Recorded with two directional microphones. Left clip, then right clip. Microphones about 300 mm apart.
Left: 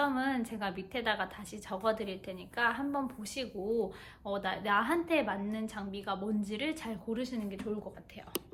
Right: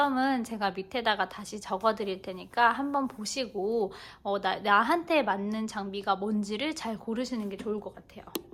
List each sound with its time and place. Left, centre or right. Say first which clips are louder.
0.0 s a woman's voice: right 5 dB; centre